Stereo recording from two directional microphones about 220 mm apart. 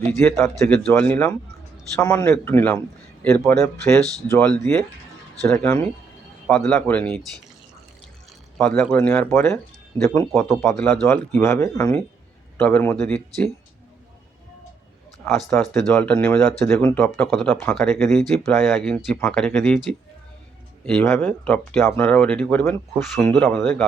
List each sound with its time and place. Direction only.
0.1 s speech: 10° left (ahead or behind)
8.5 s speech: 5° left (ahead or behind)
15.2 s speech: 10° left (ahead or behind)